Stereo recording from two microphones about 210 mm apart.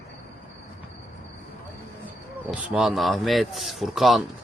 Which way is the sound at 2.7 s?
Centre (ahead or behind).